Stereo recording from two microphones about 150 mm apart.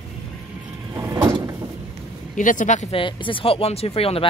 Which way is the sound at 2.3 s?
60° left (ahead or behind).